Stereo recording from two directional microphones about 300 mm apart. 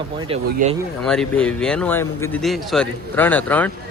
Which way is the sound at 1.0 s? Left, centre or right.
Centre.